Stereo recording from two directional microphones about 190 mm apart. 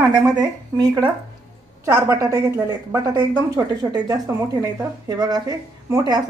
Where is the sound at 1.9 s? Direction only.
15° right (ahead or behind).